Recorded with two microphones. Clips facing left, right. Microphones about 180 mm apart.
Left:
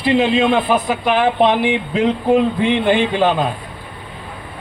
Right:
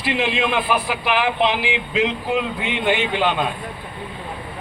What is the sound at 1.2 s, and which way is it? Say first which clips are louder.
Speech: left 6 dB; 45° left (ahead or behind).